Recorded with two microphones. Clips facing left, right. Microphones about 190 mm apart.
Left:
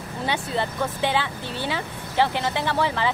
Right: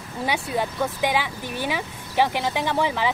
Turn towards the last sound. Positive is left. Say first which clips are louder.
# right 1 dB
turn(degrees=-15)  # may be behind; listen again after turning